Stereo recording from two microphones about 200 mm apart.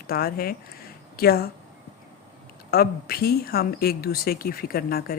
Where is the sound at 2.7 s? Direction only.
50° left (ahead or behind).